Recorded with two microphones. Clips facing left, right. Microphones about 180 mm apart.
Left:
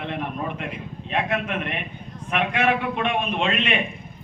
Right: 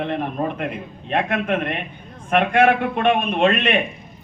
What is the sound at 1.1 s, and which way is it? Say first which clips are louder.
A man's voice: right 4 dB; 50° right (ahead or behind).